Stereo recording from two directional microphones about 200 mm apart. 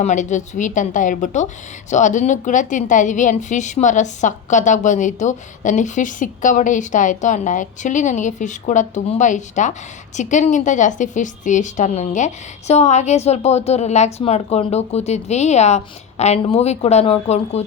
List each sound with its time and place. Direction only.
0.0 s a woman's voice: 35° left (ahead or behind)